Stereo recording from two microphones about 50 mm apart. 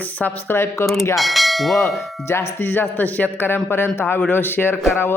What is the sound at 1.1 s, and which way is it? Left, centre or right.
Speech, centre.